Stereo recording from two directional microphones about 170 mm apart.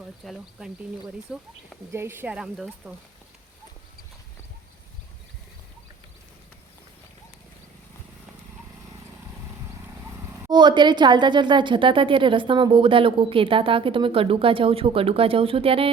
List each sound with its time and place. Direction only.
0.3 s speech: centre (ahead or behind)
1.9 s speech: 15° right (ahead or behind)
10.2 s a sound: 15° right (ahead or behind)
10.5 s a woman's voice: 25° right (ahead or behind)